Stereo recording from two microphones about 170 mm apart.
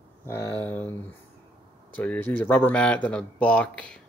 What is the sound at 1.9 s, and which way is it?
Speech, 10° left (ahead or behind).